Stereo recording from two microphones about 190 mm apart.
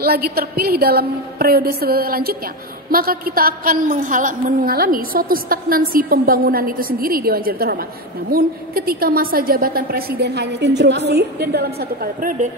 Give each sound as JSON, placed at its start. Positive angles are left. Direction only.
{"t": 0.0, "sound": "a woman's voice", "side_deg": -55}